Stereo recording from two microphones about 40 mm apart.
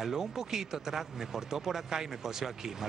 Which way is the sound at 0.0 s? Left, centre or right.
Centre.